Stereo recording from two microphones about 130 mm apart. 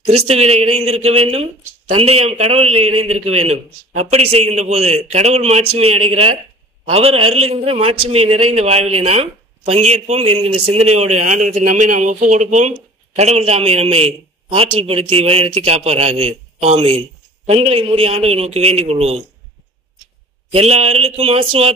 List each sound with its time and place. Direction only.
0.0 s a man's voice: 50° right (ahead or behind); by 12.7 s 65° right (ahead or behind)
13.1 s a man's voice: 55° right (ahead or behind)
20.5 s a man's voice: 50° right (ahead or behind)